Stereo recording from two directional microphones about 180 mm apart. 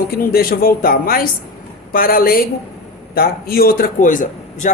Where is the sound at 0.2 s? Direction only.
55° left (ahead or behind).